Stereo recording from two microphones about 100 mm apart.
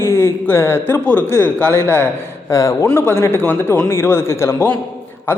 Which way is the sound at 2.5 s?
35° left (ahead or behind).